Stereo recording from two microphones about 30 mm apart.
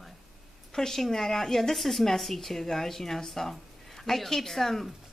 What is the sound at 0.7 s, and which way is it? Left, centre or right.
Speech, centre.